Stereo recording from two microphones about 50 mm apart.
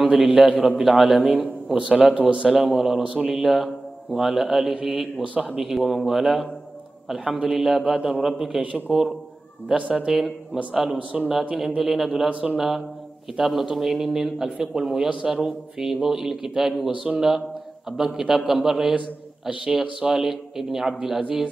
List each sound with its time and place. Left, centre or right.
0.2 s a man's voice: centre
1.8 s speech: centre
2.5 s a man's voice: centre
9.8 s speech: centre
10.1 s a man's voice: centre
11.0 s speech: right
11.5 s speech: centre
12.3 s speech: right
12.5 s a man's voice: centre